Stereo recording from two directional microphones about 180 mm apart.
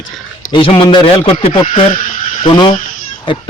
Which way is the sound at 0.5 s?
30° left (ahead or behind).